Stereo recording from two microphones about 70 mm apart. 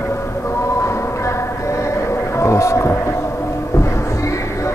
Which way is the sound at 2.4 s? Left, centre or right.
Left.